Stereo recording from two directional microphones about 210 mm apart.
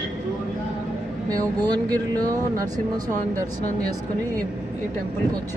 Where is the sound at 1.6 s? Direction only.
20° right (ahead or behind).